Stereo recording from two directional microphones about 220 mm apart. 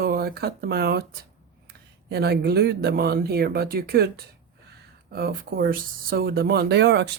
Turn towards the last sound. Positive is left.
turn(degrees=-50)  # may be behind; listen again after turning